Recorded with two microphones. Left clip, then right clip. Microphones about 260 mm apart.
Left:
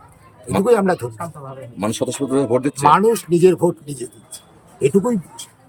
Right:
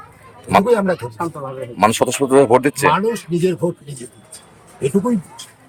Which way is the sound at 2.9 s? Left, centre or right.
Centre.